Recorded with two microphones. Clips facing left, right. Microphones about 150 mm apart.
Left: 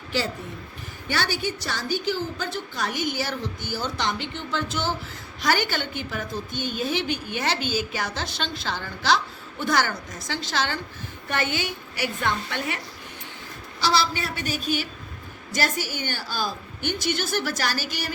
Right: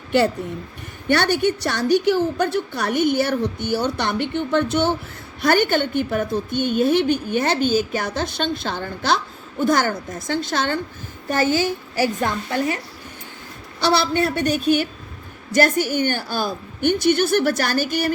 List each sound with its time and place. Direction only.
1.0 s a woman's voice: 60° right (ahead or behind)
11.3 s a woman's voice: 40° right (ahead or behind)
13.7 s a woman's voice: 60° right (ahead or behind)